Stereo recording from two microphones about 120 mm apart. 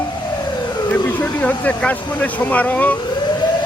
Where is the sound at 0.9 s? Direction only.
15° left (ahead or behind).